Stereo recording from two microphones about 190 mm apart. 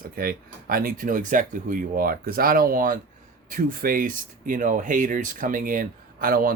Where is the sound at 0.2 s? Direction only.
50° right (ahead or behind).